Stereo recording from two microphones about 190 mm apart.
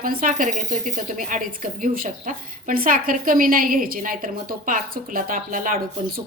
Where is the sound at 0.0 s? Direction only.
45° right (ahead or behind).